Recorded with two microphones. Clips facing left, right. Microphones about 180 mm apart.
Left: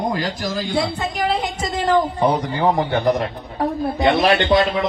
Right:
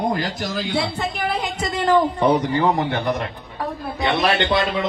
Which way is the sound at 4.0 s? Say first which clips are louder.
Left 4 dB; 35° left (ahead or behind).